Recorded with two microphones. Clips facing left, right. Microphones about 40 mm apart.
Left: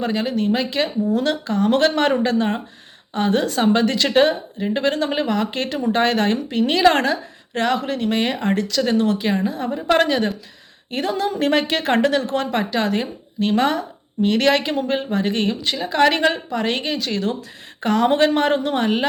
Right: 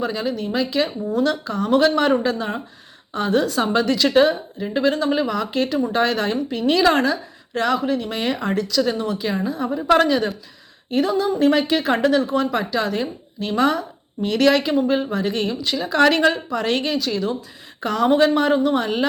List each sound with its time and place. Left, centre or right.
0.0 s speech: left
6.9 s a woman's voice: left
8.2 s speech: left
12.5 s speech: left
15.8 s a woman's voice: left
17.0 s speech: left